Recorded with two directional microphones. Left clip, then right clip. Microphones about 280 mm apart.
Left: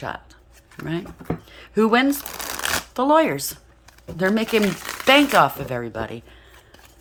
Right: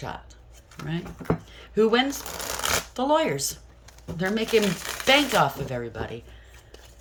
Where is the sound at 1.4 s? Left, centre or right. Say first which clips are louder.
Left 2 dB; centre.